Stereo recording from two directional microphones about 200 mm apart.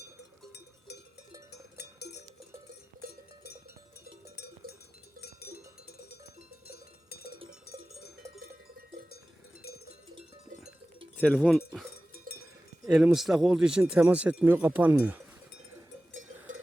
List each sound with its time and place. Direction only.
0.0 s cowbell: 55° left (ahead or behind)
5.2 s cowbell: 50° left (ahead or behind)
6.7 s cowbell: 50° left (ahead or behind)
9.6 s cowbell: 50° left (ahead or behind)
11.2 s speech: 5° left (ahead or behind)
12.9 s speech: 5° right (ahead or behind)